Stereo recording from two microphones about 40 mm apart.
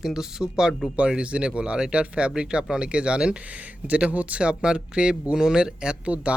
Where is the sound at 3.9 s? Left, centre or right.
Right.